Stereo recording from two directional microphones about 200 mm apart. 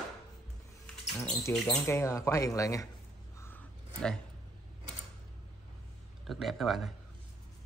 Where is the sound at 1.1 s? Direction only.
Centre (ahead or behind).